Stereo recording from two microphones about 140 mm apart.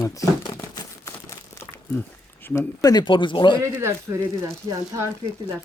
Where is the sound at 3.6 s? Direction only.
20° right (ahead or behind).